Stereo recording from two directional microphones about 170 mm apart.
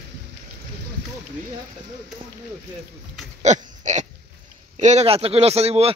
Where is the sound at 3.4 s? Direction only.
45° right (ahead or behind).